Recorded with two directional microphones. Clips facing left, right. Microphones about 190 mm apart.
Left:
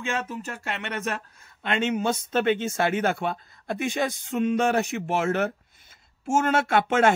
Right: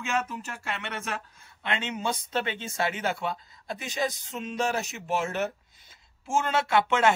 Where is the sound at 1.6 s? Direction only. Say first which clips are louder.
Left 6 dB; 45° left (ahead or behind).